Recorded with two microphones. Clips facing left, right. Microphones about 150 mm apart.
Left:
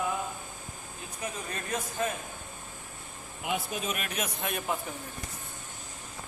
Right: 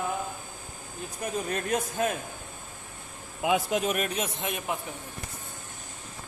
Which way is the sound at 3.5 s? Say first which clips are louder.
Right 6 dB; 80° right.